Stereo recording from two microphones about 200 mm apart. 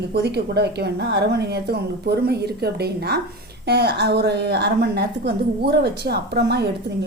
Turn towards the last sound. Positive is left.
turn(degrees=-55)  # may be behind; listen again after turning